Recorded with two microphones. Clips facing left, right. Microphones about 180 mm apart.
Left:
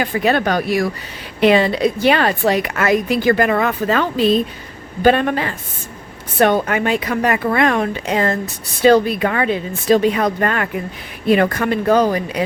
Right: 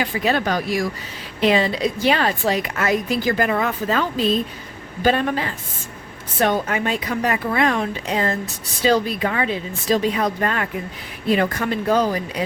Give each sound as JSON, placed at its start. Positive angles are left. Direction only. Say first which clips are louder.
{"t": 0.0, "sound": "a woman's voice", "louder": "left 4 dB", "side_deg": 55}